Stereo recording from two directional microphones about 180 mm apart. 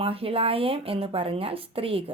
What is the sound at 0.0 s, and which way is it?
Speech, 30° right (ahead or behind).